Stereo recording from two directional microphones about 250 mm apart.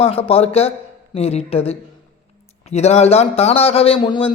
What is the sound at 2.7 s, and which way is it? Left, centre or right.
A man's voice, left.